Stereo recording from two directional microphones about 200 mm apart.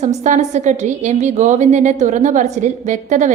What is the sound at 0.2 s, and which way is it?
A woman's voice, 35° right (ahead or behind).